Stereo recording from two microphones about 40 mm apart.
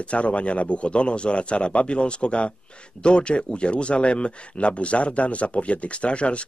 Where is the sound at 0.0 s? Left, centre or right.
Left.